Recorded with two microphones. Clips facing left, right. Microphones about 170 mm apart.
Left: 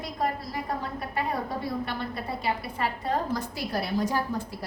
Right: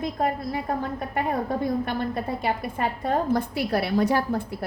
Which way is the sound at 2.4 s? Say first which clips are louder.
Right 1 dB; 50° right (ahead or behind).